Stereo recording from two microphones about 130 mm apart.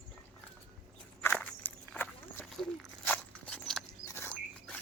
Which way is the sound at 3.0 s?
10° left (ahead or behind).